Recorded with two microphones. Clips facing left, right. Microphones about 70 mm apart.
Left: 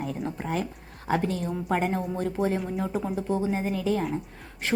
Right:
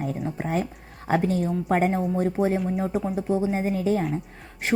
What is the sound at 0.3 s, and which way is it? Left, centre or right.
Speech, right.